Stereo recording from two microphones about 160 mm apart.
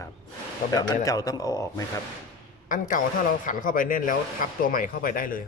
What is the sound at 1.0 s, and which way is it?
Speech, 20° left (ahead or behind).